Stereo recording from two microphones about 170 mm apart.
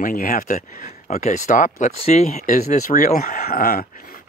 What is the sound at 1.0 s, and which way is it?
Speech, 40° left (ahead or behind).